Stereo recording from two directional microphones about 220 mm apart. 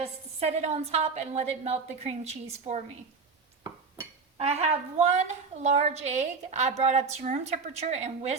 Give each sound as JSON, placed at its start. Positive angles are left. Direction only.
{"t": 0.0, "sound": "a woman's voice", "side_deg": -30}
{"t": 4.4, "sound": "a woman's voice", "side_deg": -30}